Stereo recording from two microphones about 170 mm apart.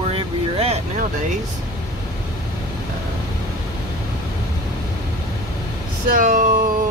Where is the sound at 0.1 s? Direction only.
35° right (ahead or behind).